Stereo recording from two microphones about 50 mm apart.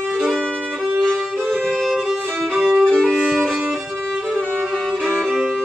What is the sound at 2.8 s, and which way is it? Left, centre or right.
Violin, centre.